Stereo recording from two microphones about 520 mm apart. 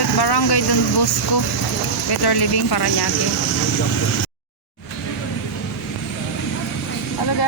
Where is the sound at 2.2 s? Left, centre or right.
Left.